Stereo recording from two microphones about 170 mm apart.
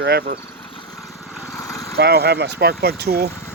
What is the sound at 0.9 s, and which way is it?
Lawn mower, centre (ahead or behind).